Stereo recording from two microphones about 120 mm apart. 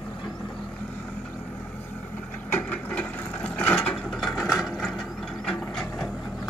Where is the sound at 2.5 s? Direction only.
10° left (ahead or behind).